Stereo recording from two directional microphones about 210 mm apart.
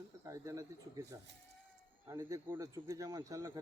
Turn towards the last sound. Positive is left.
turn(degrees=-15)  # may be behind; listen again after turning